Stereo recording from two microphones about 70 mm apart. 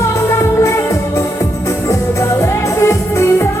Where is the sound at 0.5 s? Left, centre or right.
Left.